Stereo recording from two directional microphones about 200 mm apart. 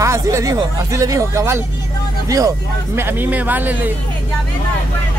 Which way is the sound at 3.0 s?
10° right (ahead or behind).